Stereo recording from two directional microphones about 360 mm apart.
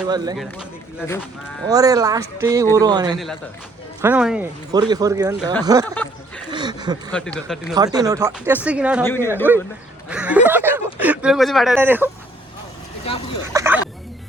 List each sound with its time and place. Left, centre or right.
0.0 s speech: centre
0.3 s speech: centre
1.6 s speech: centre
5.9 s speech: centre
6.5 s a sound: centre
7.1 s speech: centre
7.7 s speech: centre
13.5 s a sound: centre